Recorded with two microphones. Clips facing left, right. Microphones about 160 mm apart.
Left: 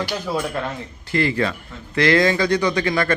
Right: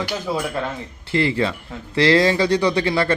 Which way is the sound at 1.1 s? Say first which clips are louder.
Right 1 dB; 25° right (ahead or behind).